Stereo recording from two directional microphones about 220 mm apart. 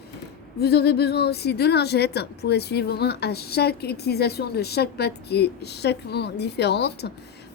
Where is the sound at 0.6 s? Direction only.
45° left (ahead or behind).